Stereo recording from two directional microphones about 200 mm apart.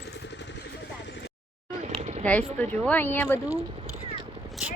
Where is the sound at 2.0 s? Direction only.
35° right (ahead or behind).